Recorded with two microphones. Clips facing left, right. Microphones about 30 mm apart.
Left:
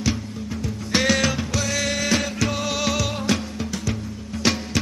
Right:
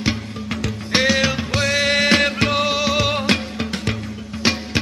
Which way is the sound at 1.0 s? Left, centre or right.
Right.